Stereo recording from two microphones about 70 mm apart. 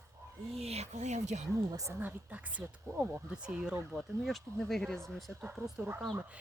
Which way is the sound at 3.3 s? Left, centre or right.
Centre.